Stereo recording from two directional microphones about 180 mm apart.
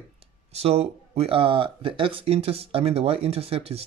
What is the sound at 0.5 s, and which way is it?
Speech, 35° right (ahead or behind).